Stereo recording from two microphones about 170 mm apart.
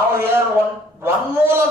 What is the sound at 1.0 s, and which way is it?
Speech, 15° right (ahead or behind).